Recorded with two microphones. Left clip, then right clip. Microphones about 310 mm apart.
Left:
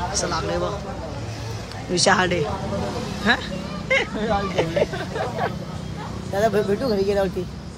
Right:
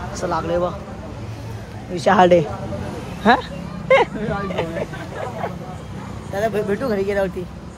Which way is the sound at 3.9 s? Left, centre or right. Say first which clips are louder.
Right 7 dB; centre.